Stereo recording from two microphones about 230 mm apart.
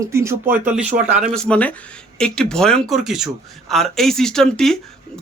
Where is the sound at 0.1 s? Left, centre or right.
Centre.